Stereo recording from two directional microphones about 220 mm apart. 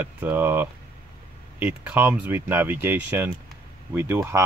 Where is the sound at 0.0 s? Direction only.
10° right (ahead or behind).